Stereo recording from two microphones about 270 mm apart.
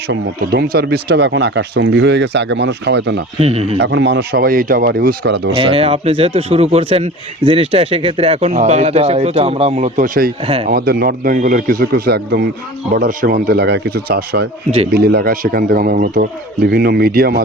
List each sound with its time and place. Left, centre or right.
0.1 s speech: right
3.4 s speech: right
3.8 s speech: right
5.5 s speech: right